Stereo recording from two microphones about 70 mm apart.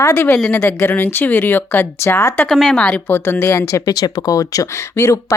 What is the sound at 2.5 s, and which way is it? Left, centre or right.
Speech, centre.